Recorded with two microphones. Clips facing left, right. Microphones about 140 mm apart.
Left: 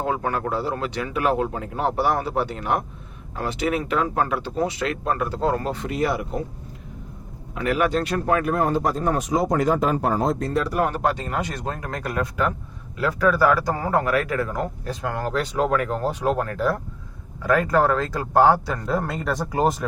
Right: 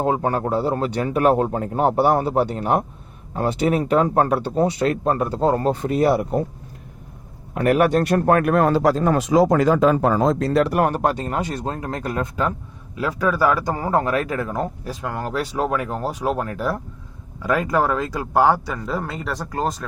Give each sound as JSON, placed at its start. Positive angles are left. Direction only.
{"t": 0.0, "sound": "speech", "side_deg": -30}
{"t": 7.5, "sound": "a man's voice", "side_deg": -50}
{"t": 14.8, "sound": "speech", "side_deg": -5}
{"t": 19.4, "sound": "speech", "side_deg": 15}